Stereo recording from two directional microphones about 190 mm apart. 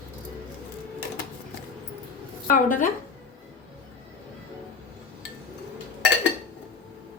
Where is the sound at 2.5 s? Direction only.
45° left (ahead or behind).